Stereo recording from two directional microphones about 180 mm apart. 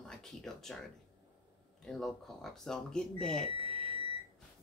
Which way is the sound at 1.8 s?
5° left (ahead or behind).